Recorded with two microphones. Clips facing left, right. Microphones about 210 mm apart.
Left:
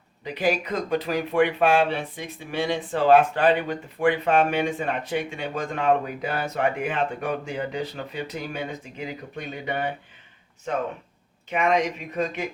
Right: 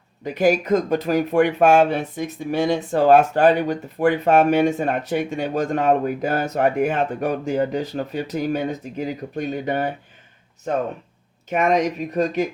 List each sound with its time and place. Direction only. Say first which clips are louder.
0.3 s speech: right 7 dB; 45° right (ahead or behind)
11.4 s speech: right 4 dB; 45° right (ahead or behind)